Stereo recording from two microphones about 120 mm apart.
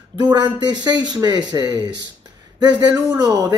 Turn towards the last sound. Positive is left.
turn(degrees=-30)  # may be behind; listen again after turning